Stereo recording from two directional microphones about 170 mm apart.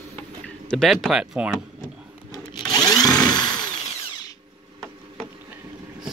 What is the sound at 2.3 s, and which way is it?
Tools, 20° left (ahead or behind).